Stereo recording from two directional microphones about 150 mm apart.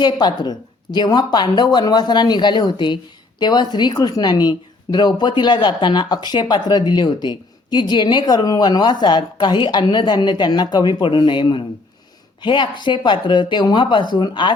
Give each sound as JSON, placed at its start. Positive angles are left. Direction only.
{"t": 0.0, "sound": "speech", "side_deg": 30}